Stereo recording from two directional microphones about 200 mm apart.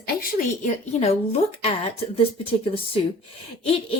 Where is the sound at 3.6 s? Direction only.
30° left (ahead or behind).